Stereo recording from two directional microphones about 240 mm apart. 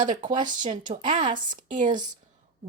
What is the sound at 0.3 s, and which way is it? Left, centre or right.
Speech, centre.